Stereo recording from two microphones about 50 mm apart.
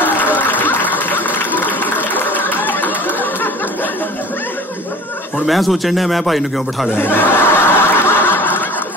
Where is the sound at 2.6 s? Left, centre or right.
Left.